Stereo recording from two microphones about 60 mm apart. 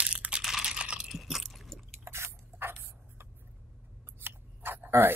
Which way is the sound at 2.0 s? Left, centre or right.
Right.